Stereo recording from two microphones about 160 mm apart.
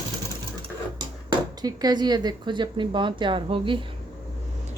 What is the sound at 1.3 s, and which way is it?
A woman's voice, 25° right (ahead or behind).